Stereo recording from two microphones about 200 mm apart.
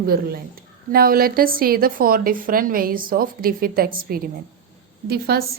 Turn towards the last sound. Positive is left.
turn(degrees=-50)  # may be behind; listen again after turning